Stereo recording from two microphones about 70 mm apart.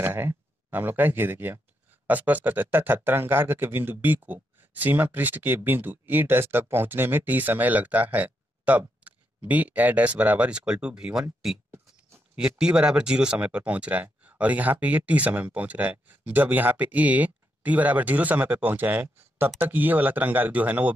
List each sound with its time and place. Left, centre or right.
0.0 s speech: right; by 11.2 s centre
12.4 s speech: centre